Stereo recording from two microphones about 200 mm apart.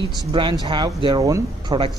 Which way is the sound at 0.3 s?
25° right (ahead or behind).